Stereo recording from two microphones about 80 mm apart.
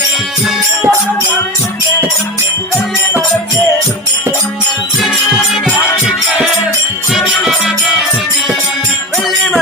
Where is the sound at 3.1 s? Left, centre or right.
Right.